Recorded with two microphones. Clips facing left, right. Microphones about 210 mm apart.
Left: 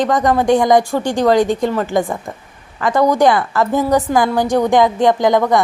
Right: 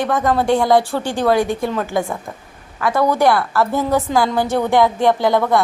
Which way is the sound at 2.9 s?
15° left (ahead or behind).